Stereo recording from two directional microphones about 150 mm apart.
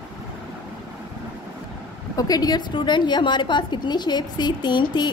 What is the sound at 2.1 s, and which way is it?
A woman's voice, 25° left (ahead or behind).